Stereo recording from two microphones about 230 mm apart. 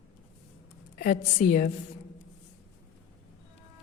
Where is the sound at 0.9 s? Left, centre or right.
Left.